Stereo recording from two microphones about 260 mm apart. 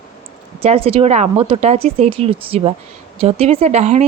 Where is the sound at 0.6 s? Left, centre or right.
Right.